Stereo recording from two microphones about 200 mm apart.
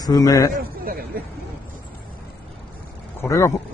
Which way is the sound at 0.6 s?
45° right (ahead or behind).